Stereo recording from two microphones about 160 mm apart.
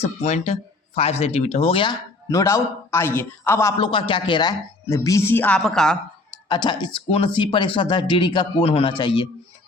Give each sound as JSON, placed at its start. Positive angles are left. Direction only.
{"t": 0.0, "sound": "speech", "side_deg": 45}
{"t": 2.3, "sound": "a man's voice", "side_deg": 20}
{"t": 3.8, "sound": "speech", "side_deg": 30}
{"t": 6.3, "sound": "speech", "side_deg": 25}